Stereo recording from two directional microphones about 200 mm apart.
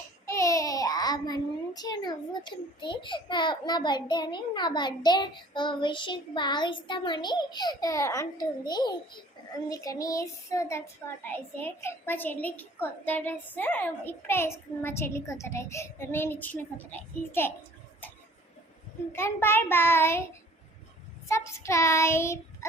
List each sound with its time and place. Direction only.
0.3 s a child's voice: 15° left (ahead or behind)
9.6 s child singing: 15° left (ahead or behind)
19.1 s child singing: 10° left (ahead or behind)
21.2 s child singing: 15° left (ahead or behind)